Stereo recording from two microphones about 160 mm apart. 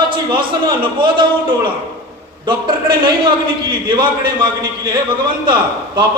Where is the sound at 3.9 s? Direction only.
30° right (ahead or behind).